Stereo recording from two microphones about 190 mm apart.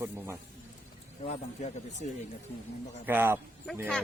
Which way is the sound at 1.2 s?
35° left (ahead or behind).